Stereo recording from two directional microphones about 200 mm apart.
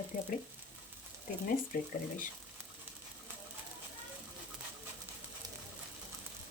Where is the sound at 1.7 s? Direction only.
45° left (ahead or behind).